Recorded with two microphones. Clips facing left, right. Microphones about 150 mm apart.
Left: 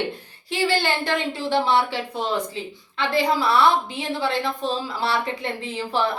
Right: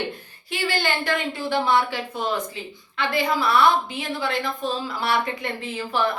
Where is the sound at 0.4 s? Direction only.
30° left (ahead or behind).